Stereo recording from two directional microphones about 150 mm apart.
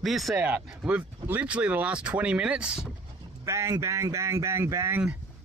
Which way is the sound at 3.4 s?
20° right (ahead or behind).